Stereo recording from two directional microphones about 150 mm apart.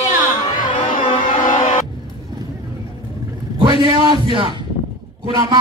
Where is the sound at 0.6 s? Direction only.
65° left (ahead or behind).